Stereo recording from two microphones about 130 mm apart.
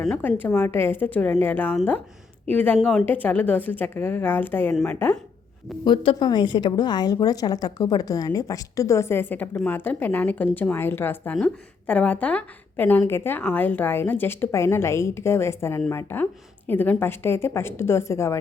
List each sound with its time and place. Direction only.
0.2 s a woman's voice: 15° left (ahead or behind)
3.1 s a woman's voice: 10° left (ahead or behind)
4.7 s a woman's voice: 5° left (ahead or behind)
5.8 s a woman's voice: 40° left (ahead or behind); by 18.3 s 20° left (ahead or behind)